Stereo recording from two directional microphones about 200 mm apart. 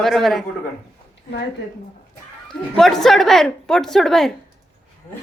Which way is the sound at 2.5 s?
Centre (ahead or behind).